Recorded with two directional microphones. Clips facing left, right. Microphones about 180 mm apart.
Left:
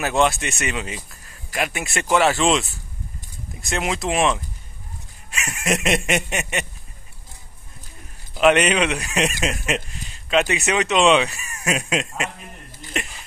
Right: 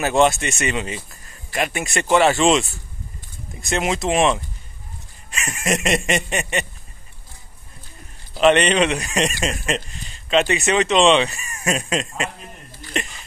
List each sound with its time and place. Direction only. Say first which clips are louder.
0.0 s speech: right 3 dB; centre (ahead or behind)
8.4 s speech: right 1 dB; 5° left (ahead or behind)